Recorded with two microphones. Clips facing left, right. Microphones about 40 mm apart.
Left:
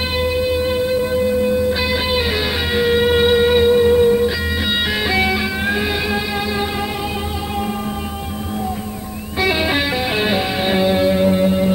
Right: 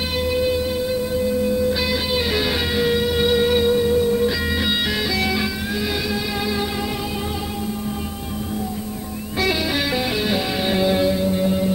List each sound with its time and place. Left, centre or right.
0.2 s music: centre
0.7 s music: left
9.6 s music: left
11.1 s music: left